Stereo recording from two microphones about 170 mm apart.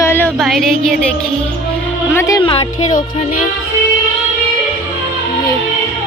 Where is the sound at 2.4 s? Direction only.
30° left (ahead or behind).